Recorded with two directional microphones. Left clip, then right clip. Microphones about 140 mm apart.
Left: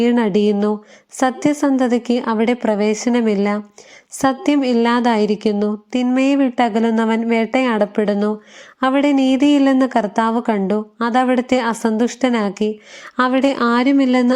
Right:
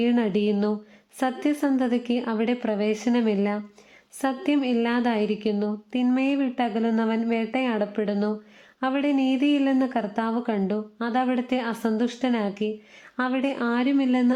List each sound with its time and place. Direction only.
0.0 s a woman's voice: 30° left (ahead or behind)